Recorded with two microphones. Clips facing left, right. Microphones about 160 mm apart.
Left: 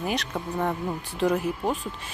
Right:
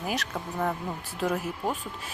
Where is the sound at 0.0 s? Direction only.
Centre (ahead or behind).